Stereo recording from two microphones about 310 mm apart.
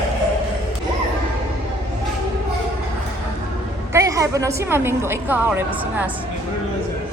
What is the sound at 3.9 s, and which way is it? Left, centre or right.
A woman's voice, centre.